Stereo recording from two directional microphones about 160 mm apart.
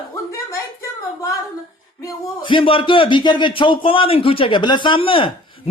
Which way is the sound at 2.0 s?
30° left (ahead or behind).